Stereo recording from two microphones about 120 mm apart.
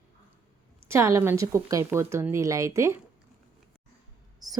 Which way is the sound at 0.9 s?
25° right (ahead or behind).